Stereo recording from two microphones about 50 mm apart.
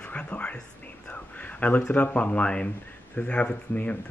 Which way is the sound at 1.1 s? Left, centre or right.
Left.